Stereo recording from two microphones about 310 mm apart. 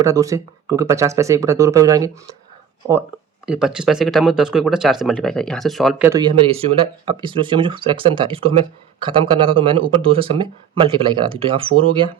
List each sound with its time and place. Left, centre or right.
0.0 s speech: centre
3.4 s speech: centre